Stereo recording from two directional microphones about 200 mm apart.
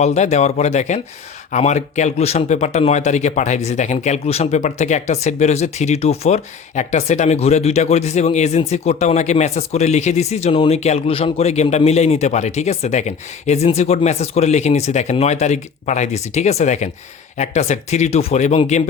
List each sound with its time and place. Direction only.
0.0 s speech: 35° left (ahead or behind)